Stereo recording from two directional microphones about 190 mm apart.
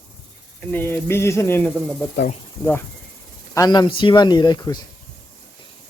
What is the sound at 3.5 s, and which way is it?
Speech, 20° left (ahead or behind).